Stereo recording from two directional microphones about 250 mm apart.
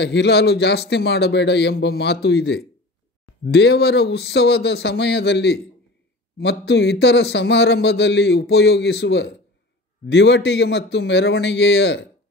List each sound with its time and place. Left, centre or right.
0.0 s a man's voice: left